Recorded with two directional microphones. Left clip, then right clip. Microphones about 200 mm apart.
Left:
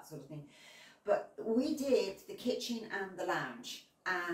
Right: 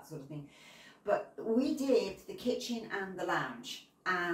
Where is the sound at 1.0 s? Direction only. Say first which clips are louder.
Right 1 dB; centre (ahead or behind).